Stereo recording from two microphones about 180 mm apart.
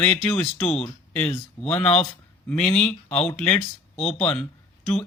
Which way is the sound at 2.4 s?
5° left (ahead or behind).